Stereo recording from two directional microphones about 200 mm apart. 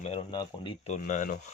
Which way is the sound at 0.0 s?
30° left (ahead or behind).